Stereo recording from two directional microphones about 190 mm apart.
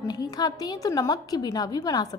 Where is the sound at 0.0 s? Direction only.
20° left (ahead or behind).